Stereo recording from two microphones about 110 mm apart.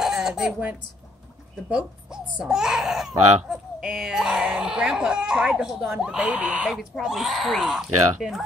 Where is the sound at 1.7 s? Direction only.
10° right (ahead or behind).